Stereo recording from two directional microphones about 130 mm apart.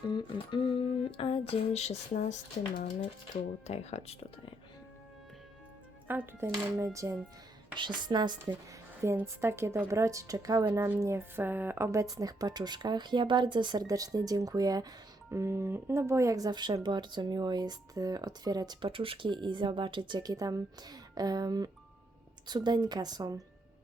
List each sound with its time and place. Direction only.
0.0 s a sound: 40° left (ahead or behind); by 2.2 s 55° left (ahead or behind)
2.7 s speech: 90° left
3.7 s a sound: 55° left (ahead or behind)
6.1 s a woman's voice: 15° right (ahead or behind)
7.8 s speech: 35° right (ahead or behind)
9.0 s a woman's voice: 20° right (ahead or behind)